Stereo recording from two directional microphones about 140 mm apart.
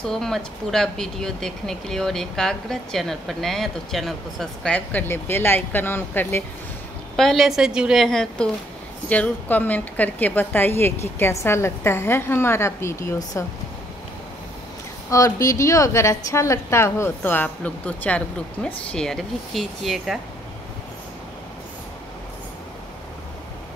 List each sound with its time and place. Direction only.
0.0 s speech: 5° left (ahead or behind)
7.2 s a woman's voice: centre (ahead or behind); by 13.5 s 25° left (ahead or behind)
15.0 s a woman's voice: 25° left (ahead or behind); by 20.2 s centre (ahead or behind)